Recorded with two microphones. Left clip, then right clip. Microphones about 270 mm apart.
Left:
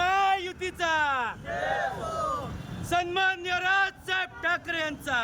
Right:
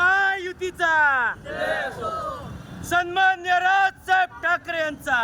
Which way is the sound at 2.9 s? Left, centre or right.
Centre.